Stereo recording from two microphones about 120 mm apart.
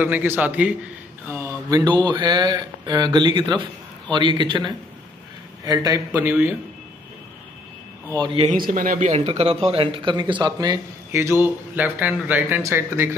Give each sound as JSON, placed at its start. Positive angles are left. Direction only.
{"t": 0.0, "sound": "speech", "side_deg": -15}
{"t": 1.7, "sound": "speech", "side_deg": -35}
{"t": 6.1, "sound": "speech", "side_deg": -15}
{"t": 8.5, "sound": "speech", "side_deg": -85}
{"t": 11.1, "sound": "speech", "side_deg": -20}